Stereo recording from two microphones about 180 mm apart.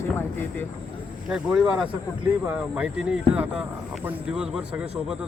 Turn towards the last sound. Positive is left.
turn(degrees=-5)  # may be behind; listen again after turning